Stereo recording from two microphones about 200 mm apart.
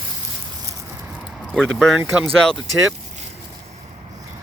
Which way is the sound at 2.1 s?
Centre (ahead or behind).